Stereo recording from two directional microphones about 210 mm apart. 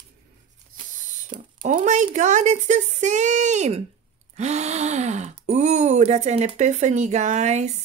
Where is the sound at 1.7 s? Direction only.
35° right (ahead or behind).